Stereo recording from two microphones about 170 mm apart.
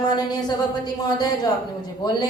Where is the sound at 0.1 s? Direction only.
25° left (ahead or behind).